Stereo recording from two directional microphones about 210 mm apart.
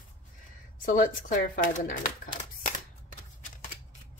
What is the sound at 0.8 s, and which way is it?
Speech, 40° left (ahead or behind).